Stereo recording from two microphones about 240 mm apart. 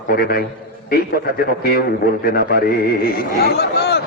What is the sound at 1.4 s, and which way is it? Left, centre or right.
A man's voice, left.